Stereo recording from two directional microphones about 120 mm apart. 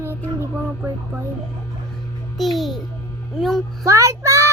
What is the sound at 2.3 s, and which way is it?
Babbling, centre (ahead or behind).